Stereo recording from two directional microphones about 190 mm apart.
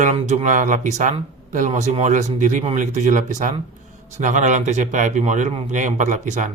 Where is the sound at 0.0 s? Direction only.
40° right (ahead or behind).